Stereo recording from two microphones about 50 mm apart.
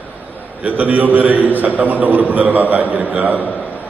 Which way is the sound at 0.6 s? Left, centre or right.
Right.